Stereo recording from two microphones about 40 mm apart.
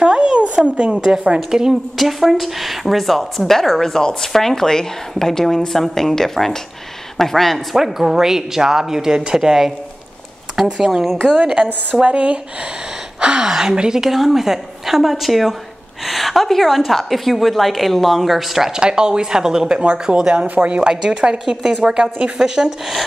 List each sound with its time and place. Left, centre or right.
0.0 s a sound: right
0.7 s a woman's voice: right
1.5 s speech: centre
2.0 s a woman's voice: centre
3.9 s a woman's voice: centre
7.7 s speech: centre
11.3 s a woman's voice: right
13.5 s a woman's voice: centre
14.0 s a woman's voice: centre
18.7 s a woman's voice: right
19.8 s speech: right
20.2 s a woman's voice: right
20.4 s a woman's voice: right
22.4 s speech: centre